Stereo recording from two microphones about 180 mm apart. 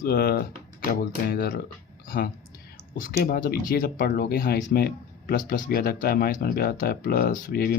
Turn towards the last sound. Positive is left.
turn(degrees=55)  # may be behind; listen again after turning